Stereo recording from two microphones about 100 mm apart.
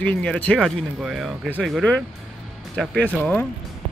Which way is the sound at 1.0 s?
5° right (ahead or behind).